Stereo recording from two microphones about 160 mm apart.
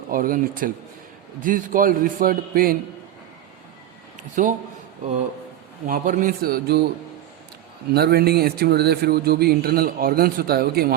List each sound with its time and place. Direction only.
0.1 s a man's voice: 60° right (ahead or behind)
4.2 s speech: 55° right (ahead or behind)
5.8 s a man's voice: 55° right (ahead or behind); by 6.8 s 75° right (ahead or behind)
7.9 s speech: 80° right